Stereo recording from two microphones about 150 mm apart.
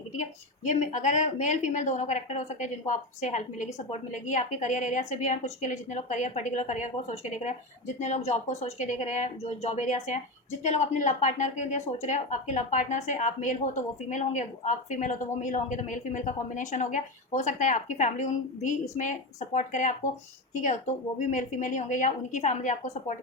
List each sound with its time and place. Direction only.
0.1 s a woman's voice: 55° left (ahead or behind)